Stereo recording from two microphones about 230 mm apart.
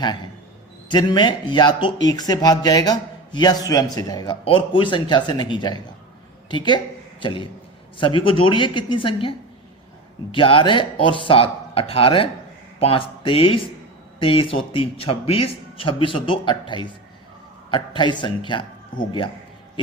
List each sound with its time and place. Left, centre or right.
0.9 s a man's voice: centre
10.3 s a man's voice: left